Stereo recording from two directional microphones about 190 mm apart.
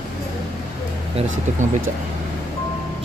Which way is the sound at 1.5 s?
40° right (ahead or behind).